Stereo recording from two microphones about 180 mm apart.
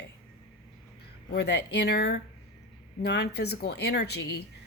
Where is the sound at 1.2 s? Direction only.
65° left (ahead or behind).